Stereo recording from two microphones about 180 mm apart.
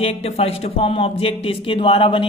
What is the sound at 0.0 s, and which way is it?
A man's voice, 35° left (ahead or behind).